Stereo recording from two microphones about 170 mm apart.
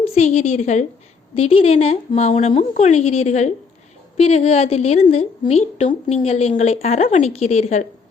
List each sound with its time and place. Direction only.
0.0 s a woman's voice: 40° left (ahead or behind)